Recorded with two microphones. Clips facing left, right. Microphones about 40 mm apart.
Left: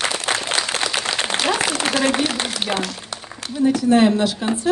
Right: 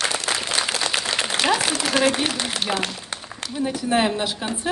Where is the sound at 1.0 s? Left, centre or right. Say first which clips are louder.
Left 2 dB; left.